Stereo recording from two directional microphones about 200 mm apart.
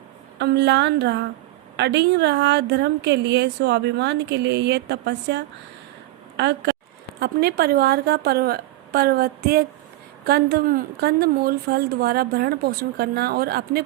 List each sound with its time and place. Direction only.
0.3 s a woman's voice: 55° right (ahead or behind)